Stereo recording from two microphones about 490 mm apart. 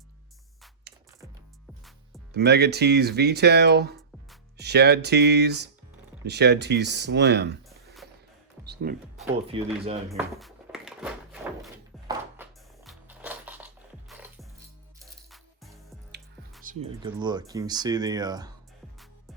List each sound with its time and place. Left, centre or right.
2.3 s speech: centre
8.6 s music: centre
9.1 s speech: centre
10.1 s a sound: centre
14.9 s music: centre
16.6 s speech: centre